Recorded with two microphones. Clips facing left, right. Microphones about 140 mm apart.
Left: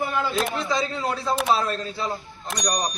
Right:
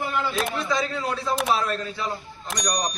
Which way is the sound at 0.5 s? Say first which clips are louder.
Even; 30° left (ahead or behind).